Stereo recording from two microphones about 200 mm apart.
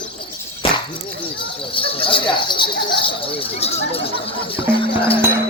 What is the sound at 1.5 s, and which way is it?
Speech, 25° left (ahead or behind).